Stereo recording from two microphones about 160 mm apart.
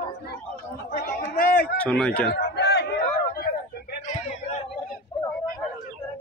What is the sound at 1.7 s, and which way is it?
Speech, 5° left (ahead or behind).